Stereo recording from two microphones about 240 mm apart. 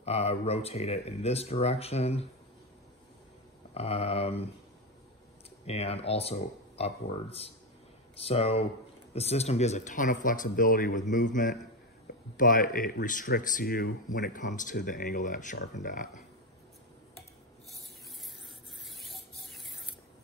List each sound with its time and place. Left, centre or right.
0.0 s speech: left
3.7 s speech: left
5.7 s speech: left
18.9 s a sound: centre